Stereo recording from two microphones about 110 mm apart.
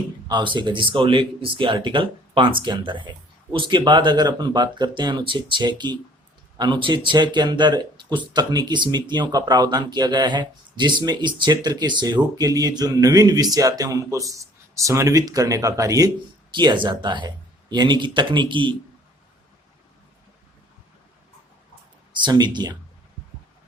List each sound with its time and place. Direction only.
0.3 s speech: 45° right (ahead or behind)
22.1 s speech: 45° right (ahead or behind)